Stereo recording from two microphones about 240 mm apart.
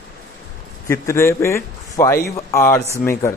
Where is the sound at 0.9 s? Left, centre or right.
Centre.